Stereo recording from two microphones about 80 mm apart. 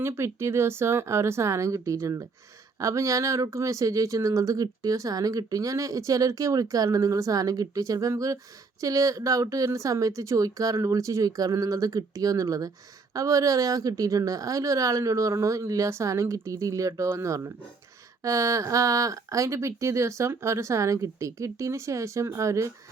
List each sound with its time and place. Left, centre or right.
0.0 s speech: right